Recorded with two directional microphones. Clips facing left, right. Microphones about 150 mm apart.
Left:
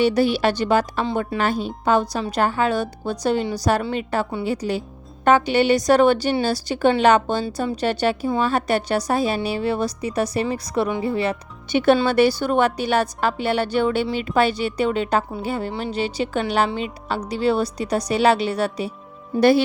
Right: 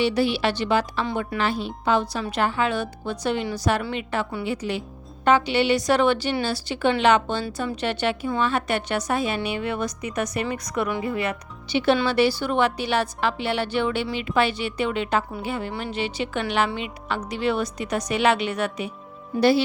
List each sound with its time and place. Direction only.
0.0 s a woman's voice: 45° left (ahead or behind)
11.7 s a woman's voice: 50° left (ahead or behind)
19.4 s speech: 50° left (ahead or behind)